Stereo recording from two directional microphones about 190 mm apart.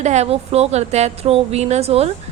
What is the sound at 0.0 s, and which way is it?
A woman's voice, 35° right (ahead or behind).